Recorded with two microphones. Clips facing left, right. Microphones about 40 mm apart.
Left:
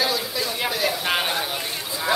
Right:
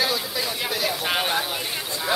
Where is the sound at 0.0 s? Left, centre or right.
Centre.